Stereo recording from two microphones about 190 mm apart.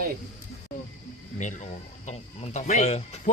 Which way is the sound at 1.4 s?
40° left (ahead or behind).